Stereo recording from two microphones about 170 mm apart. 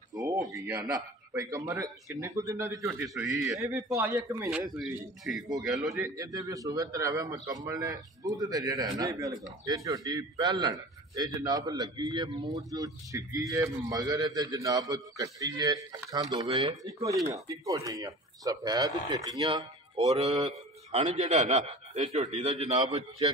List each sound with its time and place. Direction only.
0.1 s a sound: 20° right (ahead or behind)
0.6 s a man's voice: 20° right (ahead or behind)
4.7 s speech: centre (ahead or behind)
5.9 s a man's voice: 15° right (ahead or behind)
16.4 s a man's voice: 35° right (ahead or behind)
16.8 s a man's voice: 20° right (ahead or behind); by 22.8 s 35° right (ahead or behind)